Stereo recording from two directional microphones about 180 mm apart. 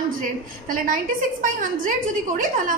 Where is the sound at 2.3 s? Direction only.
50° right (ahead or behind).